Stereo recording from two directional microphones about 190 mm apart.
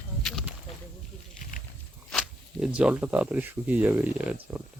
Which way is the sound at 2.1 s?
Centre (ahead or behind).